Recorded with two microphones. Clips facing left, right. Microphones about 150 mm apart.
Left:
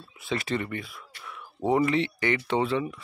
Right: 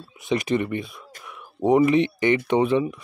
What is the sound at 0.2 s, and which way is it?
Speech, 15° right (ahead or behind).